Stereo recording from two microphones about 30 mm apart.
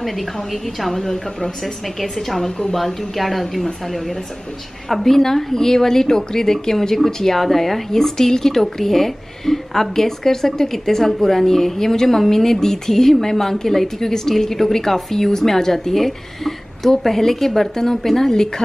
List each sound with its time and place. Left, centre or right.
0.0 s a woman's voice: centre
0.9 s speech: centre
2.0 s a woman's voice: centre
4.8 s speech: centre